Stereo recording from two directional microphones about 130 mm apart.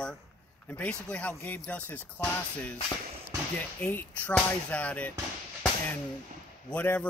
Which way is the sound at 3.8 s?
15° left (ahead or behind).